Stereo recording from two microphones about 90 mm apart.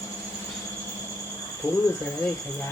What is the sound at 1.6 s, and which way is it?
Cricket, 25° left (ahead or behind).